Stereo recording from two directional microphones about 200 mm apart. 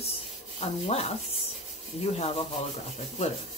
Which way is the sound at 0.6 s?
30° left (ahead or behind).